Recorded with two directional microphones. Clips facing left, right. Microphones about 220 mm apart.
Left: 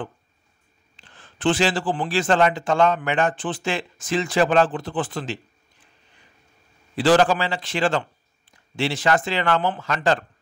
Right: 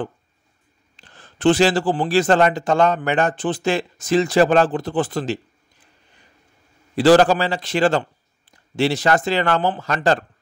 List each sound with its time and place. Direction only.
0.9 s a man's voice: 40° right (ahead or behind)
7.0 s a man's voice: 40° right (ahead or behind)